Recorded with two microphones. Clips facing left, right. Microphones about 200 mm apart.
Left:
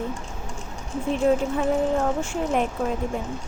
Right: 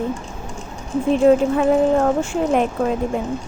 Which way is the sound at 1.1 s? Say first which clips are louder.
Right 7 dB; 90° right.